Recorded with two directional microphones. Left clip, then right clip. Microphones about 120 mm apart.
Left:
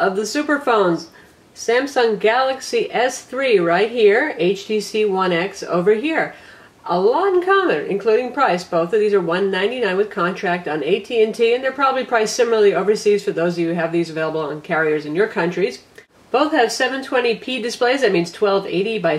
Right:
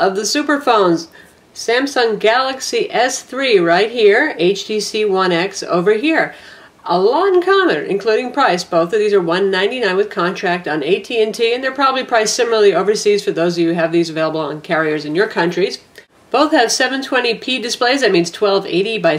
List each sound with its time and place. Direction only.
0.0 s a woman's voice: 25° right (ahead or behind)